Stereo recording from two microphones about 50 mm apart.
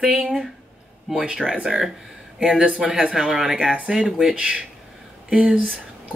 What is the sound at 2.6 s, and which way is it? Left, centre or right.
Speech, centre.